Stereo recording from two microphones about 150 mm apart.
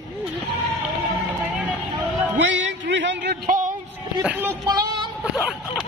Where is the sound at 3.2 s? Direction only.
80° right.